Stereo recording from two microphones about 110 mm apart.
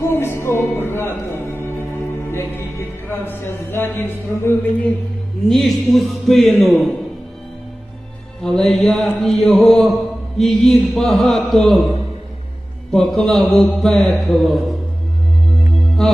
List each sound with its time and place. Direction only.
0.1 s speech: 20° left (ahead or behind)
2.3 s music: 20° left (ahead or behind)
5.5 s mantra: centre (ahead or behind)
8.4 s mantra: 5° left (ahead or behind)